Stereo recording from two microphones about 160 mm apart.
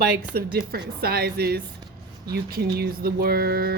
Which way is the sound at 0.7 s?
70° right (ahead or behind).